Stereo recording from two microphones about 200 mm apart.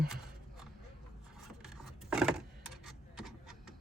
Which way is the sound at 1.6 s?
5° right (ahead or behind).